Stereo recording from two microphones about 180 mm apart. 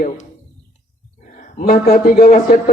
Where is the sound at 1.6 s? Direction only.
55° left (ahead or behind).